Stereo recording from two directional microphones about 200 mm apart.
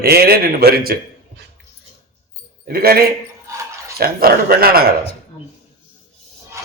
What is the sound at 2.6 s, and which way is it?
A man's voice, 50° right (ahead or behind).